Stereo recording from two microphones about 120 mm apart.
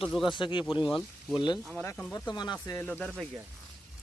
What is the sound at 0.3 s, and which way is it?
Speech, 40° left (ahead or behind).